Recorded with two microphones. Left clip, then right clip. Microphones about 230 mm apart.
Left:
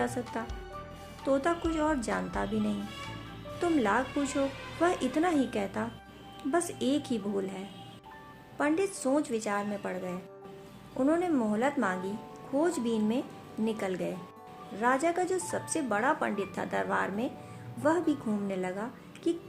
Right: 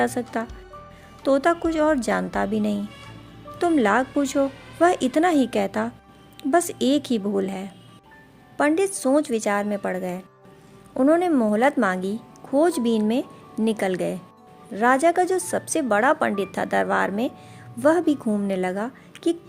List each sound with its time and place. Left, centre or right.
0.0 s speech: right